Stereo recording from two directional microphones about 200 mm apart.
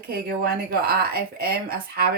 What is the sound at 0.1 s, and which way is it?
Speech, 50° right (ahead or behind).